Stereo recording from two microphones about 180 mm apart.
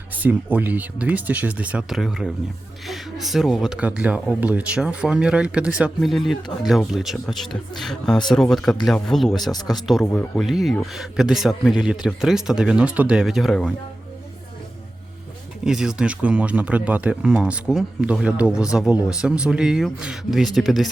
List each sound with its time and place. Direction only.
0.1 s speech: 10° right (ahead or behind)
9.4 s speech: 20° left (ahead or behind)
9.6 s speech: centre (ahead or behind)
15.6 s speech: 5° right (ahead or behind)